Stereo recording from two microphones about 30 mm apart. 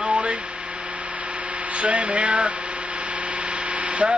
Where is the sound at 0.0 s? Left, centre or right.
Right.